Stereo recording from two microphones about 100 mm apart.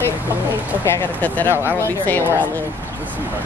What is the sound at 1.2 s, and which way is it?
Speech, 15° left (ahead or behind).